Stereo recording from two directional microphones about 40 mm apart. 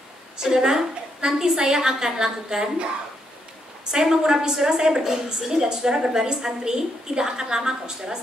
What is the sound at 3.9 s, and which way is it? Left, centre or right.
A woman's voice, centre.